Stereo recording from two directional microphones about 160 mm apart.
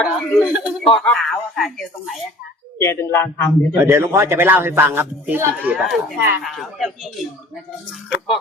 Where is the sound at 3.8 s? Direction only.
15° right (ahead or behind).